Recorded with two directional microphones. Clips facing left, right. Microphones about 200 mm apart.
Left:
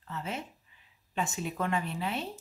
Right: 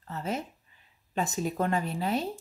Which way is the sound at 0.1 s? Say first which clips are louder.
Right 4 dB; 40° right (ahead or behind).